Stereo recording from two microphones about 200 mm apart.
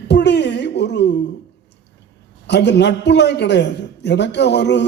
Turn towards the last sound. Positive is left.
turn(degrees=60)  # may be behind; listen again after turning